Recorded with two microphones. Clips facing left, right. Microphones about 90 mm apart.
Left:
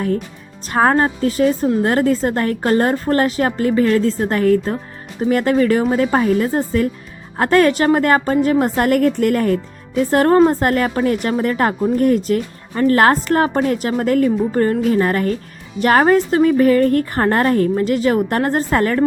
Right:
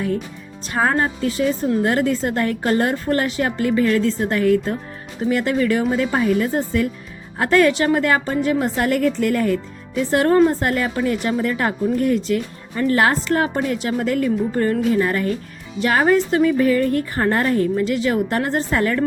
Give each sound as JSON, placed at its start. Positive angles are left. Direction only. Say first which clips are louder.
{"t": 0.7, "sound": "a woman's voice", "louder": "left 5 dB", "side_deg": 40}